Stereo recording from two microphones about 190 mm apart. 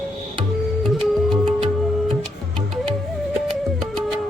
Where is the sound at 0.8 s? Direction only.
Centre (ahead or behind).